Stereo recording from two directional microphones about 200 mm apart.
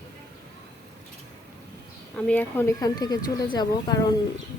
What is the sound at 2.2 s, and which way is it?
Speech, 10° left (ahead or behind).